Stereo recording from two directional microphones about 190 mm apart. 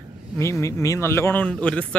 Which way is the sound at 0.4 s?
15° left (ahead or behind).